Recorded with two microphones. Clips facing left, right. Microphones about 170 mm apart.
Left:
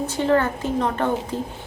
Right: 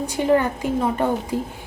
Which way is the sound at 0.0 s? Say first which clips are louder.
Right 1 dB; 15° right (ahead or behind).